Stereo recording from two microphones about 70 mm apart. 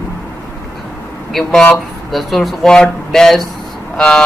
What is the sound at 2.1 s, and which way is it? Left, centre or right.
Speech, centre.